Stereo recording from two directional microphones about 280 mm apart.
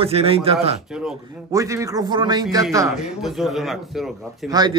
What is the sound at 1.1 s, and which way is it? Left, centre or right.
A man's voice, centre.